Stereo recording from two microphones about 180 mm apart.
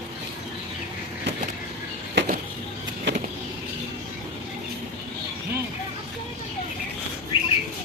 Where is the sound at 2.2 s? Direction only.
80° right.